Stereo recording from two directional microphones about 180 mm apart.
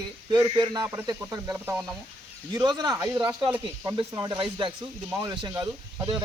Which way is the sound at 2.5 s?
25° right (ahead or behind).